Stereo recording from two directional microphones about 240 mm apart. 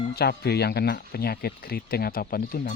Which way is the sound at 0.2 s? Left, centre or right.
Left.